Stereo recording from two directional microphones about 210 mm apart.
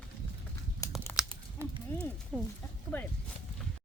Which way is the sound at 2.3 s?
Centre (ahead or behind).